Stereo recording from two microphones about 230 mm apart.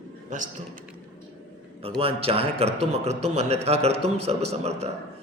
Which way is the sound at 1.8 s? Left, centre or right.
Right.